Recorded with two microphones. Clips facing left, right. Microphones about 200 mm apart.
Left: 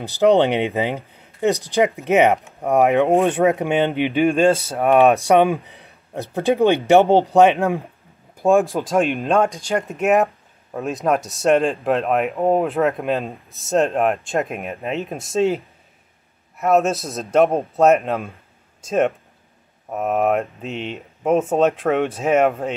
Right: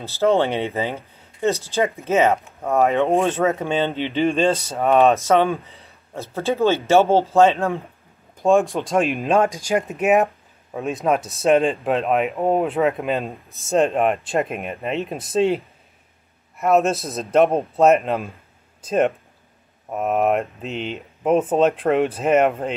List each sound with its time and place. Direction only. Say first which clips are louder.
0.0 s speech: left 3 dB; 15° left (ahead or behind)
8.4 s speech: left 1 dB; 5° left (ahead or behind)